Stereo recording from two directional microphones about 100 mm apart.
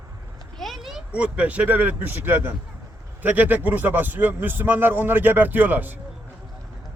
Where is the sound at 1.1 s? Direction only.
15° right (ahead or behind).